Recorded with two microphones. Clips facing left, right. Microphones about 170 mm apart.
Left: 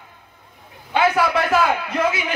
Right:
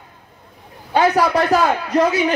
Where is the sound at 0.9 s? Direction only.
35° right (ahead or behind).